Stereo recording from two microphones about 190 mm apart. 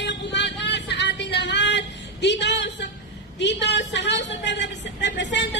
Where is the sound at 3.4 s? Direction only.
65° left (ahead or behind).